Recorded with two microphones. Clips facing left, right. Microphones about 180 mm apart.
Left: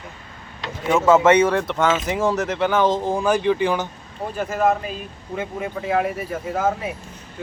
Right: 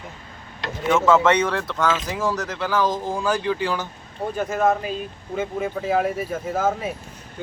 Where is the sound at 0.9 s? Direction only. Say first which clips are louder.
Left 3 dB; 20° left (ahead or behind).